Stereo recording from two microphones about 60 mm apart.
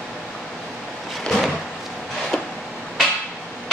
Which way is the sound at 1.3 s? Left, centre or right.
Centre.